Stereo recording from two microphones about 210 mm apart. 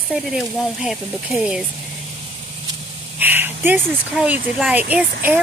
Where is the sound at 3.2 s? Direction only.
10° right (ahead or behind).